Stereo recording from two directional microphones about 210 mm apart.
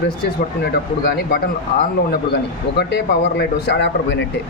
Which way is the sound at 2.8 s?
50° left (ahead or behind).